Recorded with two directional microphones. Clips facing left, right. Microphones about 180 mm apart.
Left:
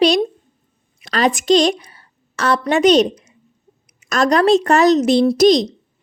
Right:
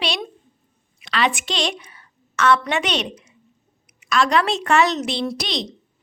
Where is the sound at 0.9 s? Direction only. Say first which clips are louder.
Left 5 dB; 40° left (ahead or behind).